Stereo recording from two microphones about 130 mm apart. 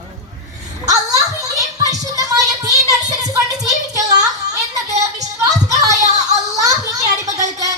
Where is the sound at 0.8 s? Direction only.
25° right (ahead or behind).